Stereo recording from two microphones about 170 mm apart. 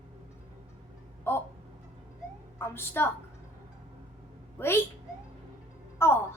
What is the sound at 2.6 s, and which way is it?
Speech, 15° left (ahead or behind).